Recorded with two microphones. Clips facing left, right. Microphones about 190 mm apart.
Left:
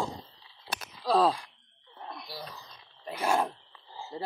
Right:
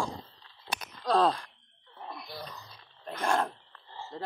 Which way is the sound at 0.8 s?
5° left (ahead or behind).